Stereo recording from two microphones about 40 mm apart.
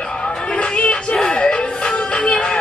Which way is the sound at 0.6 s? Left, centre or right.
Left.